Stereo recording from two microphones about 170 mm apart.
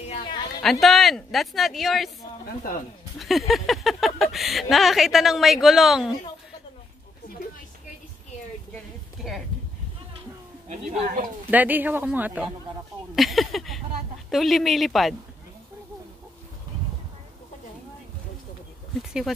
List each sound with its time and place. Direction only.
0.2 s a sound: 25° left (ahead or behind)
0.6 s speech: centre (ahead or behind)
2.7 s speech: 55° left (ahead or behind)
3.2 s speech: centre (ahead or behind)
11.1 s a woman's voice: 50° right (ahead or behind)
11.5 s a man's voice: 10° right (ahead or behind)